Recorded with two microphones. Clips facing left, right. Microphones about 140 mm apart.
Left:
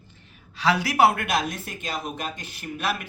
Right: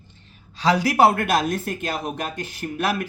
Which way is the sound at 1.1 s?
45° right (ahead or behind).